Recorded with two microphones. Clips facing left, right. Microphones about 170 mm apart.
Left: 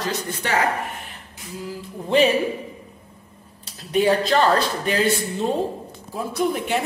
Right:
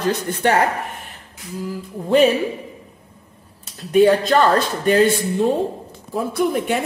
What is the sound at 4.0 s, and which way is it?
Speech, 50° right (ahead or behind).